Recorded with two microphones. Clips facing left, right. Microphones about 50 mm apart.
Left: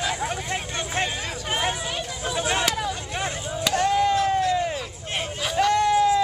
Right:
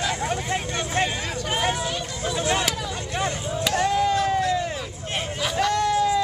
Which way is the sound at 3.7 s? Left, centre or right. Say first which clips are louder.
Left 1 dB; centre.